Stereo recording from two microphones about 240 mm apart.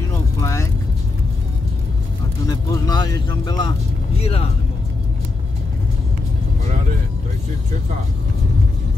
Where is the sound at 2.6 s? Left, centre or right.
Centre.